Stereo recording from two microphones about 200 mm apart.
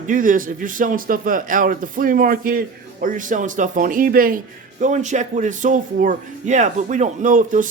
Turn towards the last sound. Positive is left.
turn(degrees=-40)  # may be behind; listen again after turning